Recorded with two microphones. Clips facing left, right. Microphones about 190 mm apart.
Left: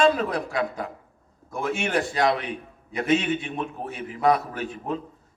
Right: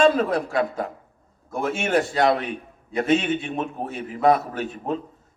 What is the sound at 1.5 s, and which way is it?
A man's voice, 40° right (ahead or behind).